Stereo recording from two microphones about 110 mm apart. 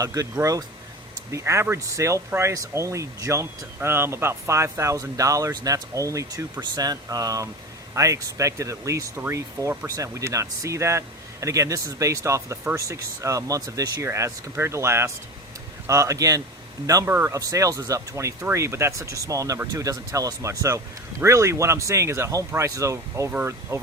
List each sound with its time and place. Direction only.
0.0 s a man's voice: 30° right (ahead or behind)